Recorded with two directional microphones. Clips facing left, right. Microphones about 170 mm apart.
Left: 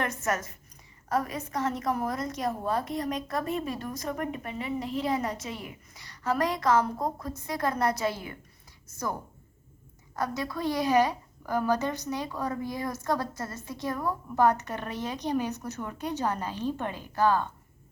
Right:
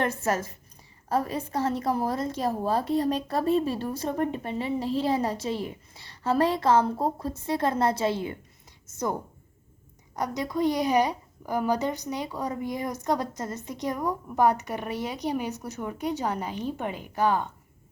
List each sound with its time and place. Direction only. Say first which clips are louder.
0.0 s a woman's voice: right 3 dB; 30° right (ahead or behind)
10.2 s a woman's voice: right 4 dB; 15° right (ahead or behind)